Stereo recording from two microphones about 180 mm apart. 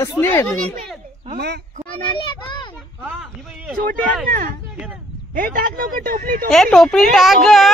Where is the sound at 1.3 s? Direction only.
65° right (ahead or behind).